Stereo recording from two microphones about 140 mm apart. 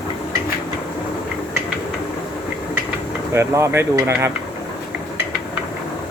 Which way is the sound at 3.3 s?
20° right (ahead or behind).